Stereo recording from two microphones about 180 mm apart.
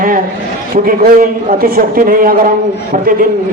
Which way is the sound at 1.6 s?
55° right (ahead or behind).